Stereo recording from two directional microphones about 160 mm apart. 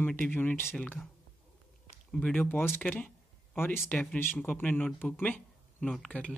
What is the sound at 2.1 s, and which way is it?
Speech, 10° left (ahead or behind).